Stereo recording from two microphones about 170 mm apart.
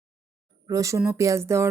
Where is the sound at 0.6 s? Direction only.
20° right (ahead or behind).